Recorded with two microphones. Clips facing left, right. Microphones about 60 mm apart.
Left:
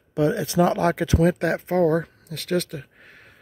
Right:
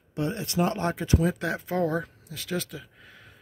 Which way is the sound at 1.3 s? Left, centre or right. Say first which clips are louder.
Left 6 dB; left.